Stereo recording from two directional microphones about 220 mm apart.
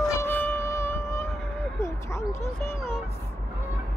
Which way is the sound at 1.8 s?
10° left (ahead or behind).